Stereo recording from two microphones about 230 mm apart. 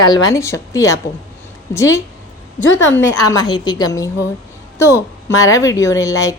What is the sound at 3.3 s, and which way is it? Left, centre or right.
A woman's voice, centre.